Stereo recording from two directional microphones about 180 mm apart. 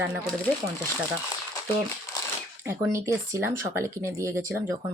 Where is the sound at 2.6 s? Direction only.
15° right (ahead or behind).